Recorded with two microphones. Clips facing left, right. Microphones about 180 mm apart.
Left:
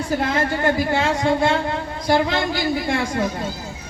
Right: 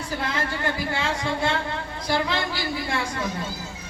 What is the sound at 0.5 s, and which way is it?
A man's voice, 45° left (ahead or behind).